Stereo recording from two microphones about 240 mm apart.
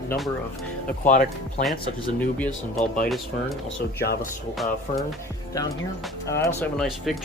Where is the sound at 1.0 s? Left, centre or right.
Left.